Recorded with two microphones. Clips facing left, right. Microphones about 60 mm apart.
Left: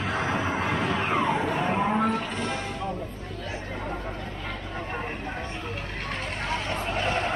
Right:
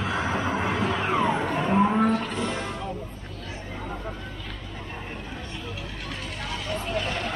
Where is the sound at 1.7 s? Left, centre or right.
Centre.